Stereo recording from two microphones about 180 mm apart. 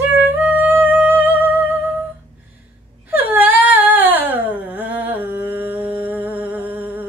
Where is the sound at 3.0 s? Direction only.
10° right (ahead or behind).